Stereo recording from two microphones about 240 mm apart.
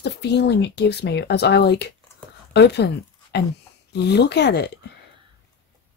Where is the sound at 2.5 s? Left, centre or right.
Left.